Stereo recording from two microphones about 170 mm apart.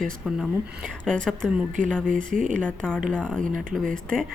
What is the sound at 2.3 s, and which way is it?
Speech, 50° right (ahead or behind).